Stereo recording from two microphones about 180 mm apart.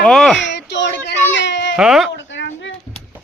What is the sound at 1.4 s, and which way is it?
Baby cry, 85° left.